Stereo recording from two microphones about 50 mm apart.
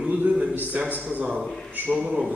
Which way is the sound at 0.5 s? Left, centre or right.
Right.